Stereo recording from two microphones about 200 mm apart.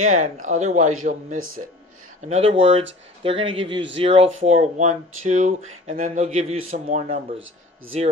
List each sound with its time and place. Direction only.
0.0 s speech: 40° right (ahead or behind)
2.3 s speech: 25° right (ahead or behind)
7.3 s speech: 75° right (ahead or behind)